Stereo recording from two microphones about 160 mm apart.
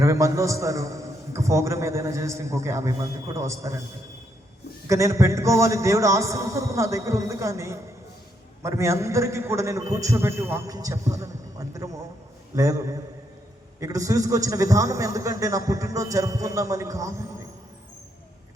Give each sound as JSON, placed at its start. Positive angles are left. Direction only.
{"t": 0.0, "sound": "a man's voice", "side_deg": -20}
{"t": 4.9, "sound": "a man's voice", "side_deg": -20}